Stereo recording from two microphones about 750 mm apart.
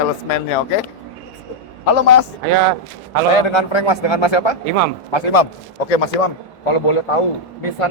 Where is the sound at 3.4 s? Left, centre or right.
Left.